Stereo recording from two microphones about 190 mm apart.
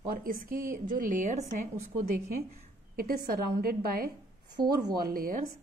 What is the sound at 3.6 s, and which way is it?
A woman's voice, 50° right (ahead or behind).